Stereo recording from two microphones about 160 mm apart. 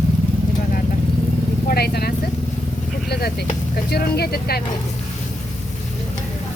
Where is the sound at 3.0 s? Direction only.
85° left.